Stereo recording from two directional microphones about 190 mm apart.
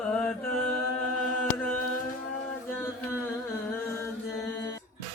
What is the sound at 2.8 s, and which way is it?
Chant, 10° left (ahead or behind).